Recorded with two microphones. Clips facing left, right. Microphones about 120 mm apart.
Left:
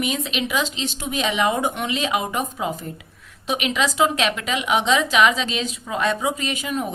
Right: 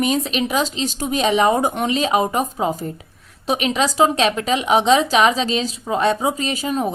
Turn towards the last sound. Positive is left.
turn(degrees=-35)  # may be behind; listen again after turning